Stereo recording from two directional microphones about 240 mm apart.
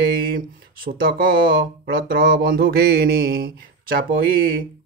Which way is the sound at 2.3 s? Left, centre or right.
Right.